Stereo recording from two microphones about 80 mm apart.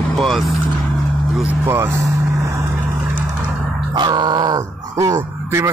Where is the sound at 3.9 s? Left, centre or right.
Right.